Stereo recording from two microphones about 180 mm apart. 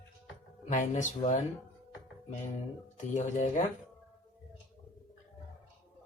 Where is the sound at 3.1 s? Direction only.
40° left (ahead or behind).